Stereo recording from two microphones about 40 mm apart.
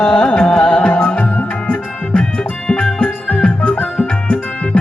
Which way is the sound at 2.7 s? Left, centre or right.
Left.